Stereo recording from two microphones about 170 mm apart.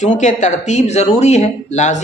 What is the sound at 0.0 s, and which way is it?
Speech, 45° left (ahead or behind).